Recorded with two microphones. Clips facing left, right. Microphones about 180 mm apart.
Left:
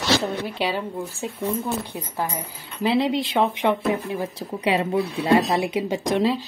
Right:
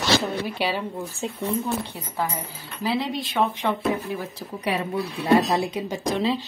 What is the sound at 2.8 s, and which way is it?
Speech, 25° left (ahead or behind).